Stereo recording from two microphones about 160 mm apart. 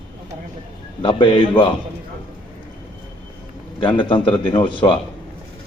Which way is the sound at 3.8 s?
30° left (ahead or behind).